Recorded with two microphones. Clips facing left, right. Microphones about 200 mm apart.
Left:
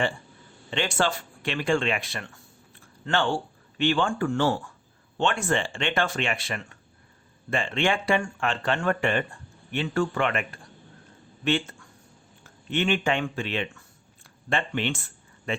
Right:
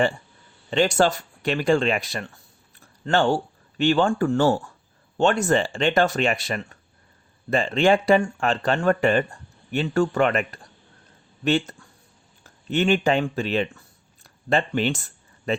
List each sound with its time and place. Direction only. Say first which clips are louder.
0.7 s speech: right 7 dB; 40° right (ahead or behind)